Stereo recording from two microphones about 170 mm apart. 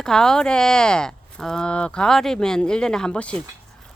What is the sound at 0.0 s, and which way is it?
Speech, 5° left (ahead or behind).